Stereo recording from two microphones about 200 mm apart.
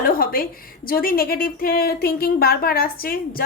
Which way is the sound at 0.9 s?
45° left (ahead or behind).